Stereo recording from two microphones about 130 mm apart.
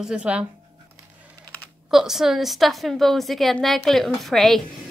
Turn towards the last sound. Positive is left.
turn(degrees=0)  # may be behind; listen again after turning